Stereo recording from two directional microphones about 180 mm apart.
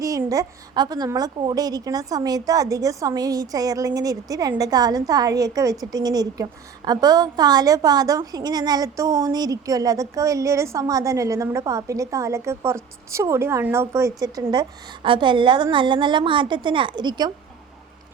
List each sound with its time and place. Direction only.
0.0 s a woman's voice: 20° right (ahead or behind)